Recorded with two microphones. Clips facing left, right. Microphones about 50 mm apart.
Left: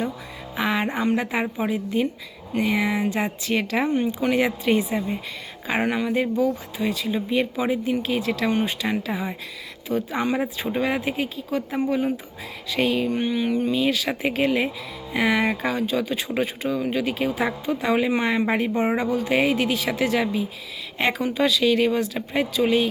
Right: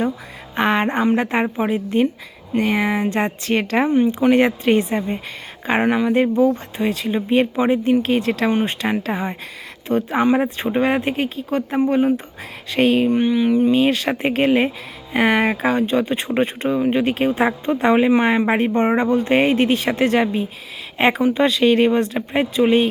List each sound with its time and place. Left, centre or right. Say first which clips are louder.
0.5 s speech: right 6 dB; right
3.1 s speech: right 4 dB; right
8.4 s speech: right 2 dB; right
8.8 s speech: right 4 dB; right
13.1 s a sound: right 7 dB; right
13.3 s speech: right 6 dB; centre
13.7 s speech: right 6 dB; right
18.2 s speech: right 5 dB; right
18.4 s speech: right 5 dB; right